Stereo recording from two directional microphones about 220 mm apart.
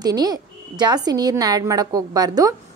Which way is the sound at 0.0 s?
15° right (ahead or behind).